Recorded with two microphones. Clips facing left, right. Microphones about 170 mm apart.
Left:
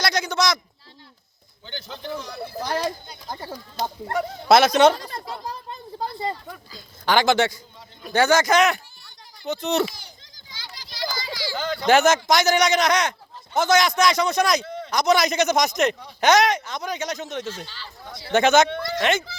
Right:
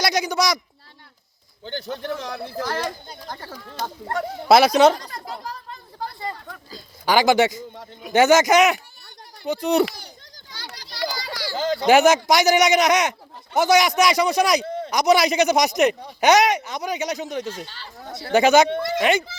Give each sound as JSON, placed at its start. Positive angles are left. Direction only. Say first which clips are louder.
{"t": 0.0, "sound": "a man's voice", "louder": "right 2 dB", "side_deg": -15}
{"t": 1.6, "sound": "speech", "louder": "right 6 dB", "side_deg": -45}
{"t": 2.6, "sound": "speech", "louder": "left 2 dB", "side_deg": 15}
{"t": 4.1, "sound": "speech", "louder": "right 1 dB", "side_deg": -5}
{"t": 4.9, "sound": "a child's voice", "louder": "left 1 dB", "side_deg": 25}
{"t": 7.0, "sound": "a man's voice", "louder": "right 2 dB", "side_deg": -10}
{"t": 10.5, "sound": "children playing", "louder": "right 3 dB", "side_deg": -65}
{"t": 11.5, "sound": "speech", "louder": "right 5 dB", "side_deg": -35}
{"t": 11.9, "sound": "a man's voice", "louder": "right 2 dB", "side_deg": -15}
{"t": 17.7, "sound": "speech", "louder": "right 3 dB", "side_deg": -50}
{"t": 18.3, "sound": "a man's voice", "louder": "right 2 dB", "side_deg": -10}